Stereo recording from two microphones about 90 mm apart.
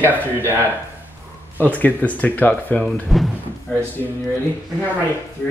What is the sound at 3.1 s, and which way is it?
Speech, centre (ahead or behind).